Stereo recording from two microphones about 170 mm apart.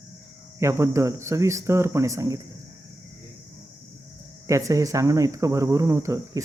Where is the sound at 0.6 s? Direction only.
15° right (ahead or behind).